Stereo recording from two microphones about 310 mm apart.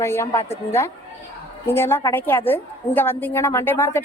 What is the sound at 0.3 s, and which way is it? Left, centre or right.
Speech, centre.